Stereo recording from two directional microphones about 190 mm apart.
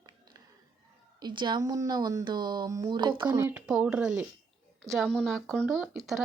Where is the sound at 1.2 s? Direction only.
25° right (ahead or behind).